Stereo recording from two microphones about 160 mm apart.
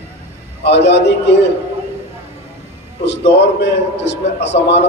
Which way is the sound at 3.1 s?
90° left.